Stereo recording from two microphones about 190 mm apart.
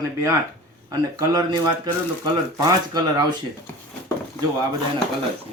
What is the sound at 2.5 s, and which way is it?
Speech, 20° right (ahead or behind).